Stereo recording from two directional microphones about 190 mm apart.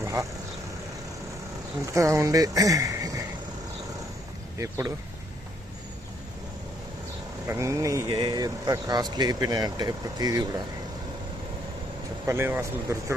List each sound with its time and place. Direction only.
0.0 s vehicle: 15° right (ahead or behind)
1.9 s speech: 15° right (ahead or behind)
4.5 s speech: 15° right (ahead or behind)
7.4 s speech: 15° right (ahead or behind)
12.2 s speech: 15° right (ahead or behind)